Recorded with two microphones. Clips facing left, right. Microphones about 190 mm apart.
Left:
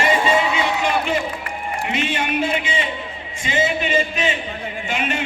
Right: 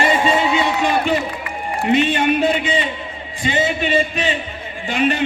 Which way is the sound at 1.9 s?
35° right (ahead or behind).